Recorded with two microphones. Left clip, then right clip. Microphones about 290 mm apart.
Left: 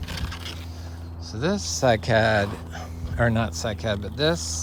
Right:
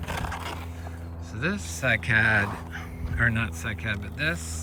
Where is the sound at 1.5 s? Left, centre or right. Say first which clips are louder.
Left 6 dB; centre.